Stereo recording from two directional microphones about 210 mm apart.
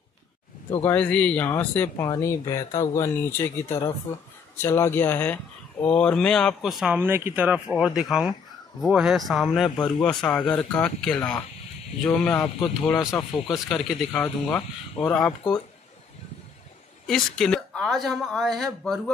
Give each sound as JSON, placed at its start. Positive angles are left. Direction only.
{"t": 0.8, "sound": "speech", "side_deg": 5}
{"t": 9.8, "sound": "speech", "side_deg": 20}
{"t": 10.0, "sound": "speech", "side_deg": 5}
{"t": 13.5, "sound": "speech", "side_deg": 0}
{"t": 17.0, "sound": "speech", "side_deg": 0}